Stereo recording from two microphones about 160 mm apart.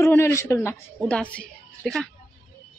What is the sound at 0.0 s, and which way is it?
A woman's voice, 15° left (ahead or behind).